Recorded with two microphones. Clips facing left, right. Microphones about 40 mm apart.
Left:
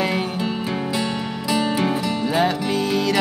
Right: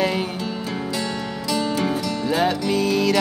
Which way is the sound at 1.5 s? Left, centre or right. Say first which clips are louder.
Left 2 dB; left.